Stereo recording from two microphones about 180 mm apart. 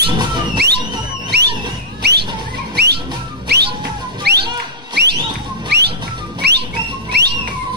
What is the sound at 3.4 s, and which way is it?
Music, 65° right (ahead or behind).